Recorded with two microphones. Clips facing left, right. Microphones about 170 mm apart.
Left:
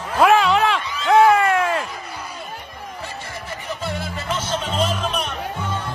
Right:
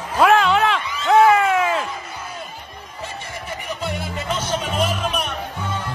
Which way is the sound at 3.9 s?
20° right (ahead or behind).